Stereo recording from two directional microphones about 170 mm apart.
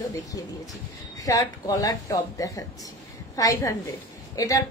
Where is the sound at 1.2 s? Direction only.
20° left (ahead or behind).